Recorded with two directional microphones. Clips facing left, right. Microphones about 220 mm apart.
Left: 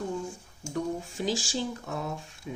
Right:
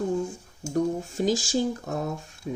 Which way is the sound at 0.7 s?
40° right (ahead or behind).